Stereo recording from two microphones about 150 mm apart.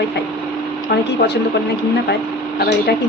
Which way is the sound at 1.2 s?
90° left.